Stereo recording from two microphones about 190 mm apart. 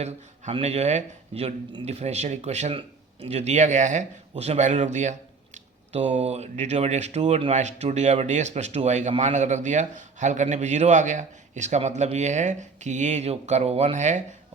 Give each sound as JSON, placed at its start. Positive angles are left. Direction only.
{"t": 0.0, "sound": "speech", "side_deg": -35}